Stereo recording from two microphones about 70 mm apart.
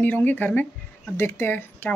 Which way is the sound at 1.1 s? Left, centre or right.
Left.